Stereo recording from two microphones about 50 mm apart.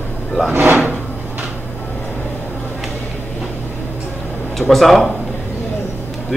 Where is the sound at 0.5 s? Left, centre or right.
Right.